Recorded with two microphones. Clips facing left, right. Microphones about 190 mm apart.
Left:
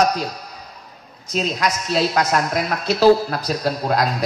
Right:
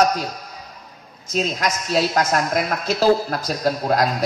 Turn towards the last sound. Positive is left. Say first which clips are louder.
# right 1 dB
turn(degrees=-45)  # may be behind; listen again after turning